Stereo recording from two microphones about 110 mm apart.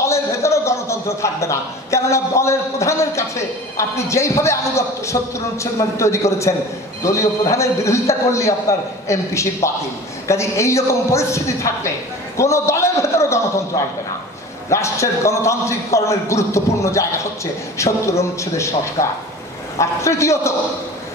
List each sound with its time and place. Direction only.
0.0 s a man's voice: 25° left (ahead or behind)
14.7 s a man's voice: 25° left (ahead or behind)